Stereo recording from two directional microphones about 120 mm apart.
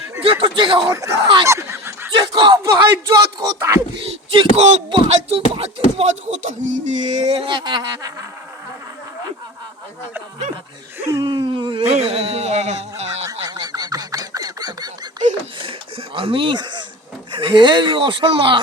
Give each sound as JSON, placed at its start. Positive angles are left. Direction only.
{"t": 0.2, "sound": "speech", "side_deg": -45}
{"t": 0.9, "sound": "speech", "side_deg": -25}
{"t": 1.5, "sound": "a sound", "side_deg": -20}
{"t": 2.1, "sound": "speech", "side_deg": -35}
{"t": 3.9, "sound": "speech", "side_deg": -45}
{"t": 5.1, "sound": "a sound", "side_deg": -55}
{"t": 7.3, "sound": "speech", "side_deg": -40}
{"t": 11.0, "sound": "speech", "side_deg": -25}
{"t": 11.3, "sound": "speech", "side_deg": -45}
{"t": 11.9, "sound": "a sound", "side_deg": -65}
{"t": 13.2, "sound": "a sound", "side_deg": -35}
{"t": 16.1, "sound": "speech", "side_deg": -50}